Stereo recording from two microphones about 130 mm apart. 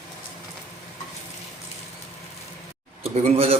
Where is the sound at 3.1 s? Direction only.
50° right (ahead or behind).